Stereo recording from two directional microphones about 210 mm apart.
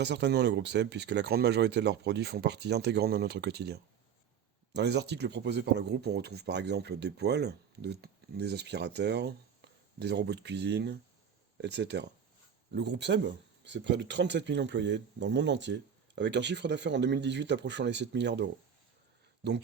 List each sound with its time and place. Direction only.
0.0 s speech: 55° right (ahead or behind)